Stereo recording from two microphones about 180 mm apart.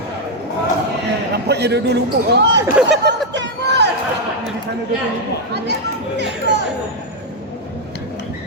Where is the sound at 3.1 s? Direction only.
75° right (ahead or behind).